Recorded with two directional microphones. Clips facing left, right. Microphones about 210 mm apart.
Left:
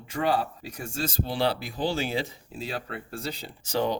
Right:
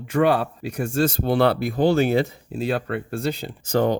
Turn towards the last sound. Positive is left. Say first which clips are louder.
# right 6 dB
turn(degrees=-55)  # may be behind; listen again after turning